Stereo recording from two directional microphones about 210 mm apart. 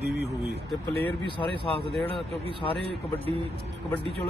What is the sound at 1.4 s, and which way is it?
Speech, 15° left (ahead or behind).